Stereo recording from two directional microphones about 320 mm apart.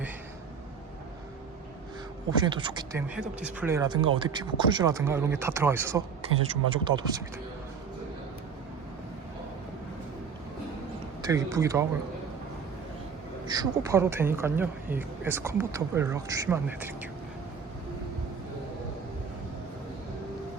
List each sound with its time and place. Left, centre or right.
2.3 s speech: centre
11.2 s speech: centre
13.5 s speech: centre